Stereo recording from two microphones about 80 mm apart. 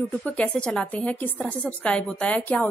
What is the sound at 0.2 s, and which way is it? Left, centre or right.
A woman's voice, centre.